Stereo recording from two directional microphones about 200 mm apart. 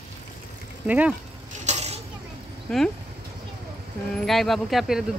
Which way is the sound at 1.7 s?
35° right (ahead or behind).